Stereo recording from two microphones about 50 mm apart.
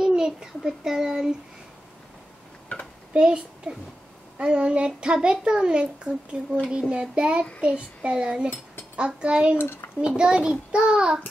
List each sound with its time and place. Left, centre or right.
0.0 s a sound: centre
0.7 s a child's voice: centre
3.1 s a child's voice: centre